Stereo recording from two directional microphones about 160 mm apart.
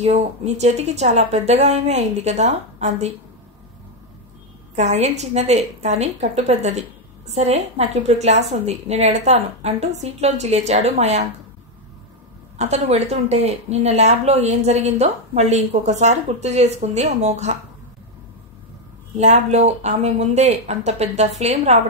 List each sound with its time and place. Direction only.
0.0 s speech: 40° right (ahead or behind)
4.7 s speech: 45° right (ahead or behind)
12.5 s speech: 45° right (ahead or behind)
19.1 s speech: 45° right (ahead or behind)